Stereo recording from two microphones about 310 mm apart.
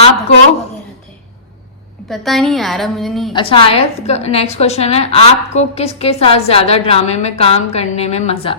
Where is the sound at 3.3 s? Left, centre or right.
Centre.